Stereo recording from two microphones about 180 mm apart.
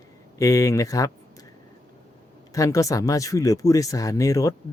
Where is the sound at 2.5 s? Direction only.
20° left (ahead or behind).